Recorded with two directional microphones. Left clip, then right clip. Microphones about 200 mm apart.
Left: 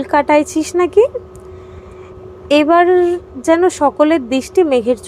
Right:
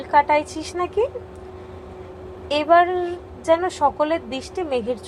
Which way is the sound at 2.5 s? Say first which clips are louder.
Left 6 dB; 50° left (ahead or behind).